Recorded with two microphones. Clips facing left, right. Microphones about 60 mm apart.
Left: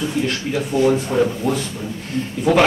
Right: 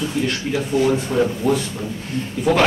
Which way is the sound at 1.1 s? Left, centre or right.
Left.